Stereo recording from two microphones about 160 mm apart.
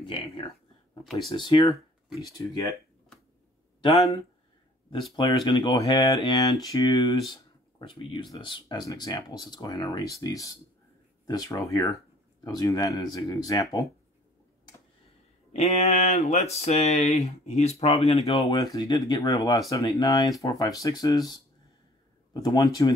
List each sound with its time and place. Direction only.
0.0 s speech: 30° left (ahead or behind)
5.1 s speech: 30° left (ahead or behind)
15.5 s speech: 45° left (ahead or behind)
18.4 s speech: 20° left (ahead or behind)